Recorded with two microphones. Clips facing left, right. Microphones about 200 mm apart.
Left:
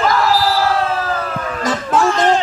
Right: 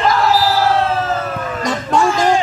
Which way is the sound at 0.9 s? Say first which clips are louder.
Right 2 dB; 25° right (ahead or behind).